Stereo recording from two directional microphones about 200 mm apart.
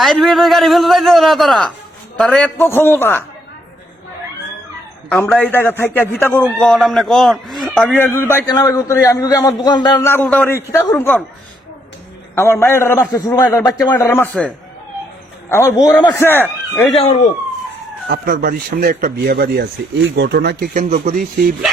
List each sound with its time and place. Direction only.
0.0 s a man's voice: centre (ahead or behind)
5.0 s a man's voice: 5° left (ahead or behind)
12.3 s a man's voice: 10° left (ahead or behind)
18.1 s speech: 50° right (ahead or behind)
20.9 s speech: 35° right (ahead or behind)